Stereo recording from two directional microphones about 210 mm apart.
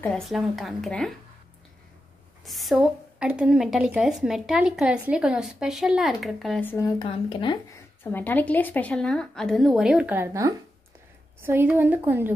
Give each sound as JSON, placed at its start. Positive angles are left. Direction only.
{"t": 0.0, "sound": "a woman's voice", "side_deg": 0}
{"t": 2.4, "sound": "a woman's voice", "side_deg": 0}
{"t": 7.0, "sound": "speech", "side_deg": 25}
{"t": 8.0, "sound": "a woman's voice", "side_deg": 10}